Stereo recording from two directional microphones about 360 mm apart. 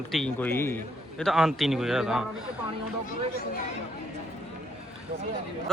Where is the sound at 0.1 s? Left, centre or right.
Centre.